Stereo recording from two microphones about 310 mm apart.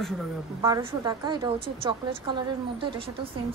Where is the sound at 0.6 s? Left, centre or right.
Centre.